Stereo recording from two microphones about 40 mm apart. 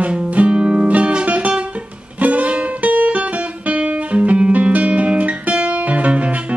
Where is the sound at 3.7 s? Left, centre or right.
Right.